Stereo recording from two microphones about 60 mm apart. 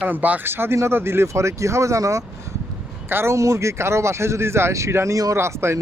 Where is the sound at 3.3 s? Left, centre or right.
Right.